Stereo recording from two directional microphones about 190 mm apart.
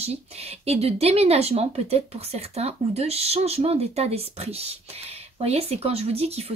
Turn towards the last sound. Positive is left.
turn(degrees=-30)  # may be behind; listen again after turning